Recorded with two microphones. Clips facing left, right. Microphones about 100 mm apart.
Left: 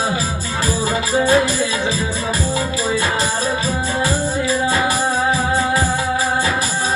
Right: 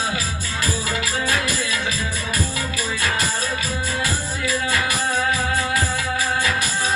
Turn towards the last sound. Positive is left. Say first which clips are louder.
# left 5 dB
turn(degrees=30)  # may be behind; listen again after turning